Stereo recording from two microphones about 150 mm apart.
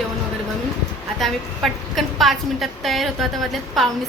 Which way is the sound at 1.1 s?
Centre (ahead or behind).